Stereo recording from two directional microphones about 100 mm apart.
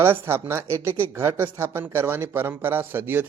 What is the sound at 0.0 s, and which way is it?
Speech, 25° right (ahead or behind).